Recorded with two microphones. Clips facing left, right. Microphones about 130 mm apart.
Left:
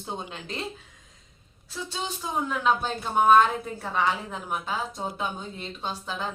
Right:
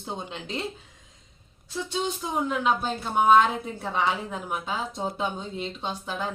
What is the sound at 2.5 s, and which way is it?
Speech, 15° right (ahead or behind).